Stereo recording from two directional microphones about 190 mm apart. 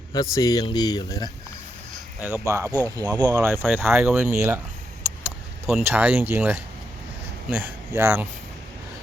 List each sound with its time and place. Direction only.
0.1 s speech: 20° left (ahead or behind)
2.2 s speech: 15° right (ahead or behind)
5.2 s keys jangling: 5° right (ahead or behind)
5.8 s speech: 10° right (ahead or behind)